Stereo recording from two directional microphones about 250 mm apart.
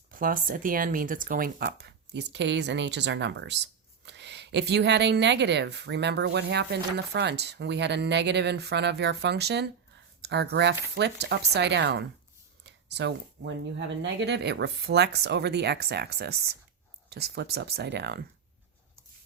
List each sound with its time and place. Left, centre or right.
0.1 s speech: right